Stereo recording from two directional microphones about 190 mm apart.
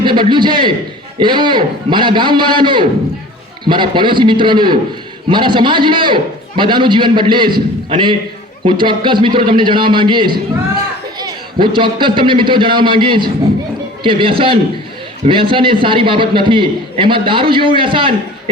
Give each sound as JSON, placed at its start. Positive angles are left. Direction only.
{"t": 0.0, "sound": "a man's voice", "side_deg": -25}
{"t": 11.6, "sound": "a man's voice", "side_deg": -25}